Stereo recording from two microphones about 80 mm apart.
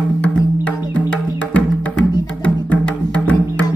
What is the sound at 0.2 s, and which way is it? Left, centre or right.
Music, centre.